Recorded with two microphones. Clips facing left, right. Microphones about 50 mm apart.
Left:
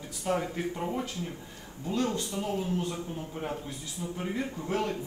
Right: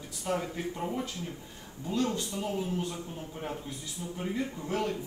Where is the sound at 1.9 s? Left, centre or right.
Left.